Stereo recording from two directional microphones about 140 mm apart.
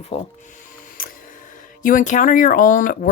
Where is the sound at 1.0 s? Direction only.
90° left.